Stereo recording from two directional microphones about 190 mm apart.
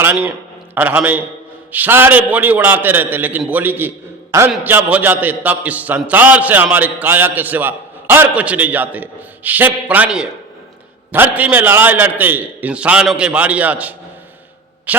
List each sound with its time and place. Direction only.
0.0 s a man's voice: 10° right (ahead or behind)